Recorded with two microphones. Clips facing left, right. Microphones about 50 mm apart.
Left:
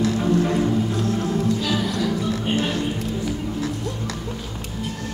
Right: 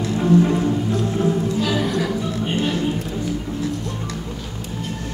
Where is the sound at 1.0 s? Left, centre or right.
Right.